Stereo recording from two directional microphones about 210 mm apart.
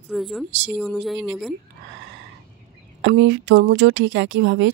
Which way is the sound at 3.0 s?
55° right (ahead or behind).